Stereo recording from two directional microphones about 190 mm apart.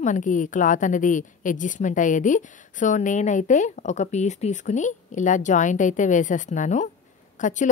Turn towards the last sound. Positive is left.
turn(degrees=40)  # may be behind; listen again after turning